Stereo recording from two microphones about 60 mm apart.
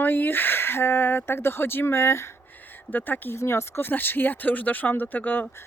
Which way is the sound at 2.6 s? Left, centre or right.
Left.